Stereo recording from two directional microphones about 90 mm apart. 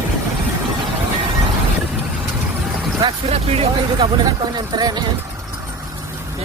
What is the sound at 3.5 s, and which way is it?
Speech, 90° right.